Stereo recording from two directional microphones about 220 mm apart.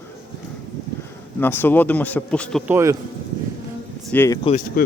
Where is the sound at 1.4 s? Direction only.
10° left (ahead or behind).